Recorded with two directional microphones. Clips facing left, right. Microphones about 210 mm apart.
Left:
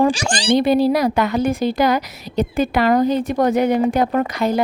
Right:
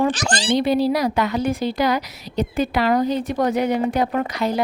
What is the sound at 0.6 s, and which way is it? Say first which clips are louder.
A woman's voice: left 3 dB; 50° left (ahead or behind).